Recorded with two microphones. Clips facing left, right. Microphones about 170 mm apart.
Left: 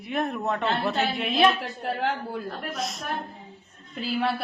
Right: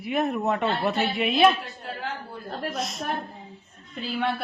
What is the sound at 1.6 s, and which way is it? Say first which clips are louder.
Speech: left 7 dB; 70° left (ahead or behind).